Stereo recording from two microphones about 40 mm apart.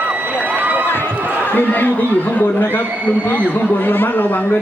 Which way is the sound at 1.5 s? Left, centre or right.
Left.